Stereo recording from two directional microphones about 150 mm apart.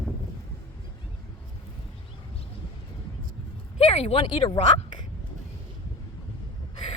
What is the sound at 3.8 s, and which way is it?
Speech, 40° left (ahead or behind).